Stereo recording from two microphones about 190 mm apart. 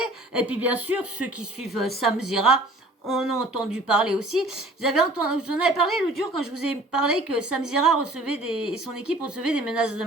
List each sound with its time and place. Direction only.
0.0 s speech: 5° right (ahead or behind)